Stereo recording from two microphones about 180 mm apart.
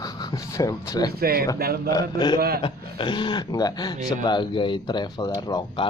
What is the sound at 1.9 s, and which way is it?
Speech, 20° left (ahead or behind).